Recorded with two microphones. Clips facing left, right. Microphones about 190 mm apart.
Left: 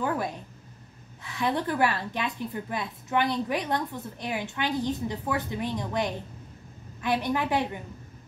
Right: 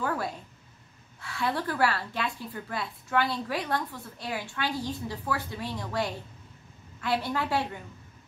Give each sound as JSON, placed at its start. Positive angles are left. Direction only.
{"t": 0.0, "sound": "a woman's voice", "side_deg": 20}